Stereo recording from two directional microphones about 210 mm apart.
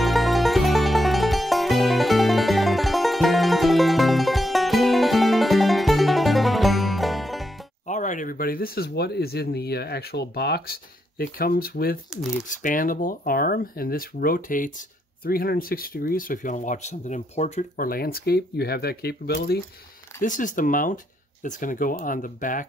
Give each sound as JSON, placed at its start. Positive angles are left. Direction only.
{"t": 0.0, "sound": "music", "side_deg": 0}
{"t": 7.8, "sound": "speech", "side_deg": 35}
{"t": 20.2, "sound": "speech", "side_deg": 40}